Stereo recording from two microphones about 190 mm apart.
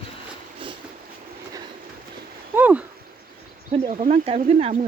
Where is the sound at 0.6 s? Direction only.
25° right (ahead or behind).